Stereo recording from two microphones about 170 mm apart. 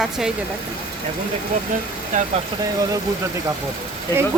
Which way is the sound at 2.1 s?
50° right (ahead or behind).